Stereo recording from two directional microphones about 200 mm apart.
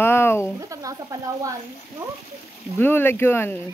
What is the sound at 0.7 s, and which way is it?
Speech, 15° right (ahead or behind).